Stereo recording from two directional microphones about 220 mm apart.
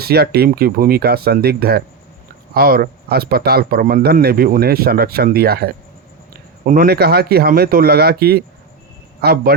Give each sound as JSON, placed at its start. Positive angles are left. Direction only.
{"t": 0.0, "sound": "a man's voice", "side_deg": -45}